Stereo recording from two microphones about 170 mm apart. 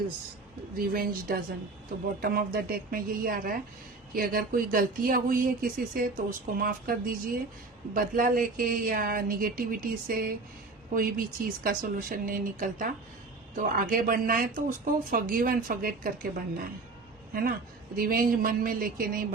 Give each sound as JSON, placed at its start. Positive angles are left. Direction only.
{"t": 0.8, "sound": "speech", "side_deg": -60}
{"t": 17.3, "sound": "speech", "side_deg": -60}